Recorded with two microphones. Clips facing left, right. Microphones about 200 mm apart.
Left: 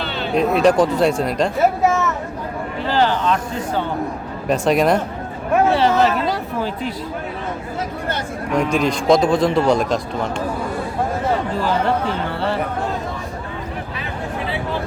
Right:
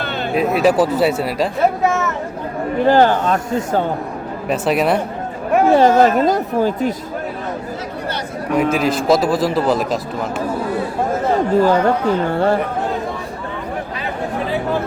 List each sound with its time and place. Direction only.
0.3 s speech: 5° right (ahead or behind)
2.8 s speech: 50° right (ahead or behind)
4.4 s speech: 5° right (ahead or behind)
5.7 s speech: 45° right (ahead or behind)
8.5 s speech: 5° right (ahead or behind)
11.6 s speech: 45° right (ahead or behind)